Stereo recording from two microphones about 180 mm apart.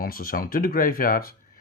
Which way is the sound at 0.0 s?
55° left (ahead or behind).